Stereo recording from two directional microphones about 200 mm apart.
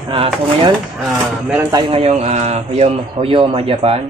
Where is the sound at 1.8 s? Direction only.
30° right (ahead or behind).